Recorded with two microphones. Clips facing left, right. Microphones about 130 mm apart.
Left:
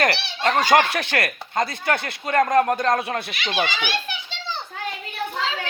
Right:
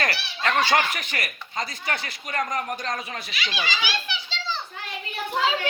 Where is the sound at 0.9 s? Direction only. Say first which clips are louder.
Left 7 dB; 75° left (ahead or behind); by 4.4 s 55° left (ahead or behind).